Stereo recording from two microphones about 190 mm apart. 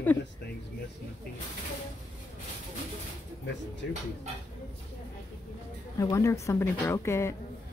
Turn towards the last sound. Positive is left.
turn(degrees=15)  # may be behind; listen again after turning